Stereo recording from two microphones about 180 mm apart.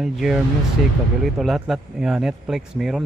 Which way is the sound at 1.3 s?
Centre (ahead or behind).